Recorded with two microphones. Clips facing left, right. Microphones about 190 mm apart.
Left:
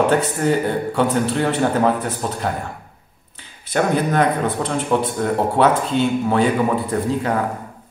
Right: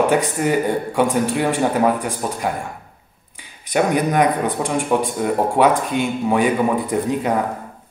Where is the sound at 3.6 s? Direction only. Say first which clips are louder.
Right 1 dB; 15° right (ahead or behind).